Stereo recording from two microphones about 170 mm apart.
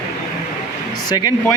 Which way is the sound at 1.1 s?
25° left (ahead or behind).